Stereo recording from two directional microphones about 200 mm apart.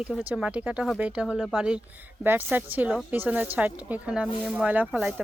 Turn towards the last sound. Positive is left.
turn(degrees=0)  # may be behind; listen again after turning